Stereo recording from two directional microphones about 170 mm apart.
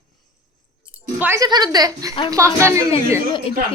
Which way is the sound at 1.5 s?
25° right (ahead or behind).